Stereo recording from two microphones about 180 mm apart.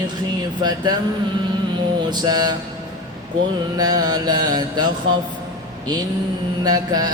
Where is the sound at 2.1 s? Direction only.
20° right (ahead or behind).